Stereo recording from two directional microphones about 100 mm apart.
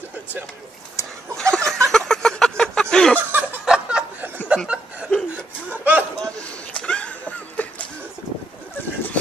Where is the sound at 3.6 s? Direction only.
10° right (ahead or behind).